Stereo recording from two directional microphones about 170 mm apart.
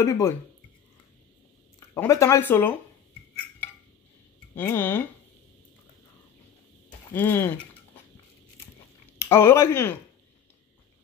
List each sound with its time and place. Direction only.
0.0 s speech: 15° left (ahead or behind)
2.0 s speech: 20° left (ahead or behind)
4.6 s speech: 10° left (ahead or behind)
7.2 s speech: 15° left (ahead or behind)
9.2 s speech: 15° left (ahead or behind)